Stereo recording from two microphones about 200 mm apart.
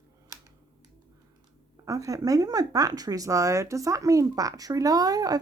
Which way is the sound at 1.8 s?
15° right (ahead or behind).